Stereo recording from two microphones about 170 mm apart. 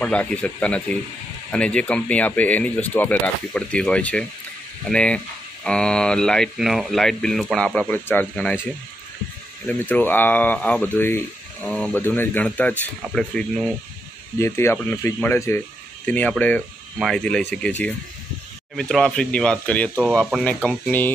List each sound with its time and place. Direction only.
0.0 s speech: 10° left (ahead or behind)
9.7 s speech: 10° left (ahead or behind)